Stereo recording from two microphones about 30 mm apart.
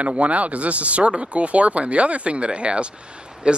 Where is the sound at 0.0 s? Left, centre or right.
Right.